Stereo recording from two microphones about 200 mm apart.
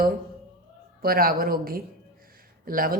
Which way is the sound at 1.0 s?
50° right (ahead or behind).